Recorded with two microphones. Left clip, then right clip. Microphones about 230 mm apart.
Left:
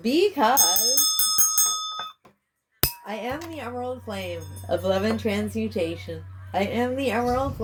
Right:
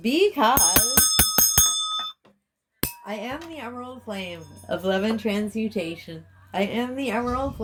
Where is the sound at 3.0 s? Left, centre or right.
Right.